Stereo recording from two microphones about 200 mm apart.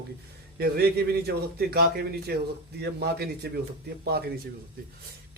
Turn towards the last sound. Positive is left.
turn(degrees=-50)  # may be behind; listen again after turning